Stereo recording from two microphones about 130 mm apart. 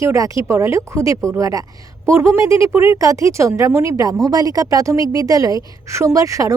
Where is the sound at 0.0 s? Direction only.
25° right (ahead or behind).